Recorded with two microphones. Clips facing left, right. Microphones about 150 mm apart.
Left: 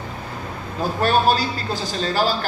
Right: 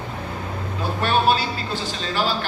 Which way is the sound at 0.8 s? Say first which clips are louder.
Left 2 dB; 40° left (ahead or behind).